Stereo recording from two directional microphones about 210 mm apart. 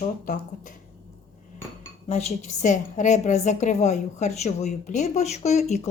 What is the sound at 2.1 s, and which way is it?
A woman's voice, 30° left (ahead or behind).